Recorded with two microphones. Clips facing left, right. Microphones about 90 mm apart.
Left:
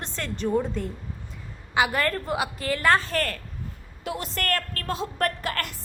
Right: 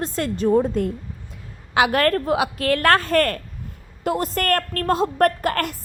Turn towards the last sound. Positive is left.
turn(degrees=-45)  # may be behind; listen again after turning